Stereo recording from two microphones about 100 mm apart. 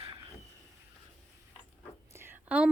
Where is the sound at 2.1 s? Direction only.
25° right (ahead or behind).